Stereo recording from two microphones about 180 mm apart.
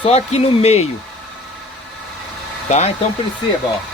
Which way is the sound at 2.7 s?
40° left (ahead or behind).